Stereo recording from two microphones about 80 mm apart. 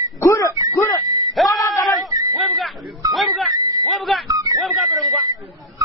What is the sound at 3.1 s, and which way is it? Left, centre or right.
Dog, centre.